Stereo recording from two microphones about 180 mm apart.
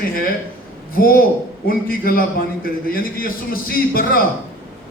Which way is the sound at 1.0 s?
55° left (ahead or behind).